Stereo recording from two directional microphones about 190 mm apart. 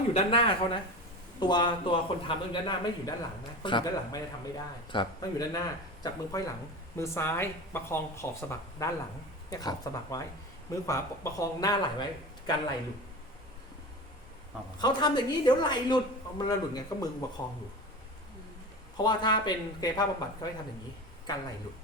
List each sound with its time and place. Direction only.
0.1 s speech: 30° left (ahead or behind)
14.8 s speech: 20° left (ahead or behind)
18.9 s speech: 25° left (ahead or behind)